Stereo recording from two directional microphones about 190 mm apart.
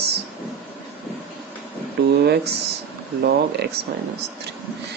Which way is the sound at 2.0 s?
60° right (ahead or behind).